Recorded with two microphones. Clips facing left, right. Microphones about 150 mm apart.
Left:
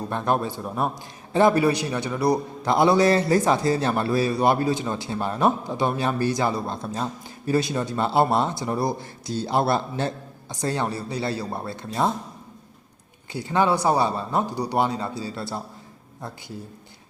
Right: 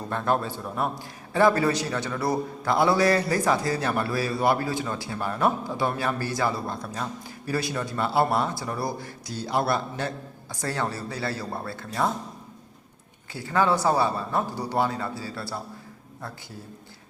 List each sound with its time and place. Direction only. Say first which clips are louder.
0.1 s a man's voice: left 1 dB; 15° left (ahead or behind)
13.3 s a man's voice: left 2 dB; 20° left (ahead or behind)